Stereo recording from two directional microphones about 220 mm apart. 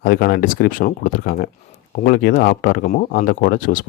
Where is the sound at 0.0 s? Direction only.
45° left (ahead or behind).